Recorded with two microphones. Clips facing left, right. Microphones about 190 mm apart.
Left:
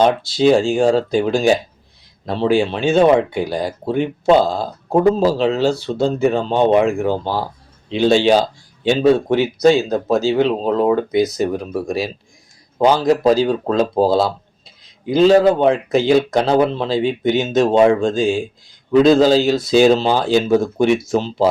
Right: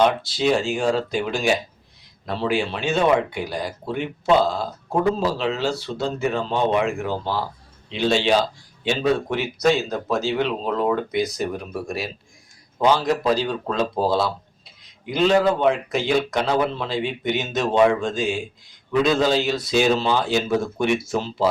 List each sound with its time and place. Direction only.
0.0 s speech: 35° left (ahead or behind)
7.9 s speech: 35° left (ahead or behind)
13.1 s speech: 40° left (ahead or behind)